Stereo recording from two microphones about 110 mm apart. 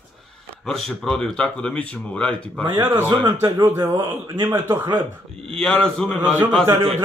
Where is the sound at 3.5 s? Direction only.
30° right (ahead or behind).